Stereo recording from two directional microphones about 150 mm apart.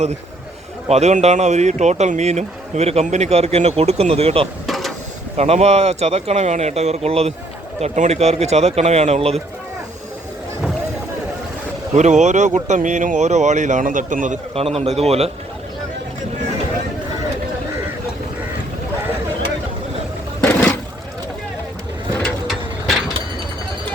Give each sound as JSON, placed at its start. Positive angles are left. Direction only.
{"t": 0.9, "sound": "speech", "side_deg": -45}
{"t": 4.6, "sound": "mechanisms", "side_deg": 0}
{"t": 5.4, "sound": "speech", "side_deg": -45}
{"t": 11.9, "sound": "speech", "side_deg": -50}
{"t": 14.5, "sound": "speech", "side_deg": -40}
{"t": 20.4, "sound": "a sound", "side_deg": 10}
{"t": 22.2, "sound": "a sound", "side_deg": 5}